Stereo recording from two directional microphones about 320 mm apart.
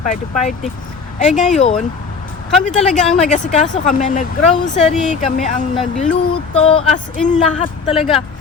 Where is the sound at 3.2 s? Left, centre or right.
Left.